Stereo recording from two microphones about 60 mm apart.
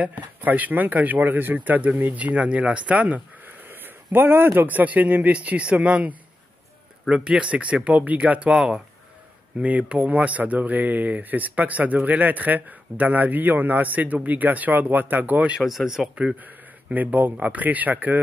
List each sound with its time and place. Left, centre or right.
0.0 s speech: right
3.6 s a sound: right
4.6 s speech: right
7.2 s speech: centre
8.5 s speech: centre
15.6 s speech: centre
16.3 s speech: right